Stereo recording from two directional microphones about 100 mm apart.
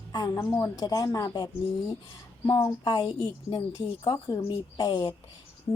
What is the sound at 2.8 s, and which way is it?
A woman's voice, 45° left (ahead or behind).